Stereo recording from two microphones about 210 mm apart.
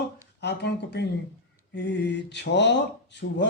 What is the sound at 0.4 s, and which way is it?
A man's voice, 55° left (ahead or behind).